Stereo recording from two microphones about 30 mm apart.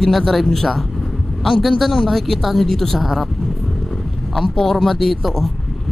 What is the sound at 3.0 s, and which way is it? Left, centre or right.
Speech, centre.